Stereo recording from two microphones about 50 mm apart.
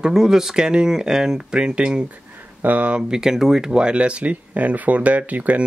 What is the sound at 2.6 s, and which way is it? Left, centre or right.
Speech, right.